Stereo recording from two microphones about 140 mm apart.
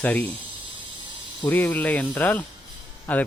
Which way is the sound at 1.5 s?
15° left (ahead or behind).